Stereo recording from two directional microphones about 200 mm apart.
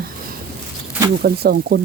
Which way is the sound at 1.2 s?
50° right (ahead or behind).